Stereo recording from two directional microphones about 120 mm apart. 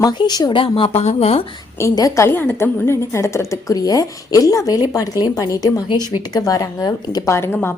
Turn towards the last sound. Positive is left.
turn(degrees=20)  # may be behind; listen again after turning